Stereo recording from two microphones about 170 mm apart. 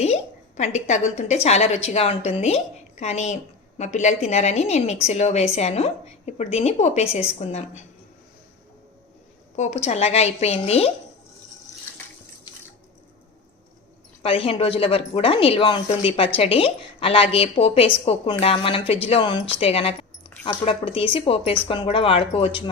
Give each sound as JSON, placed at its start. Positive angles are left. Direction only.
{"t": 0.0, "sound": "a woman's voice", "side_deg": 40}
{"t": 9.6, "sound": "speech", "side_deg": 40}
{"t": 14.2, "sound": "speech", "side_deg": 35}